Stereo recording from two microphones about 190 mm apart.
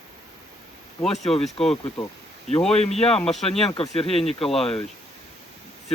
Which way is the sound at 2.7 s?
35° left (ahead or behind).